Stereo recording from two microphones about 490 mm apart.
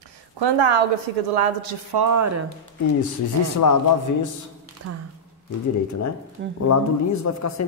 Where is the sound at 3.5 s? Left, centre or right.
Left.